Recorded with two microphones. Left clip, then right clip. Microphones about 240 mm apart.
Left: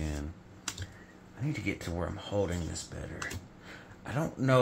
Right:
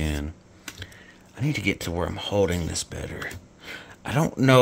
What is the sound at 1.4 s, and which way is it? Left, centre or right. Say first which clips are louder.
Speech: right 9 dB; right.